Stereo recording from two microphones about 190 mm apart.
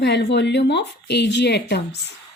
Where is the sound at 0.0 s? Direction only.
65° left (ahead or behind).